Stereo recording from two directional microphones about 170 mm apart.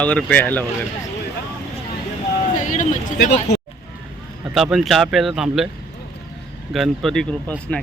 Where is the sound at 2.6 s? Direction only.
50° left (ahead or behind).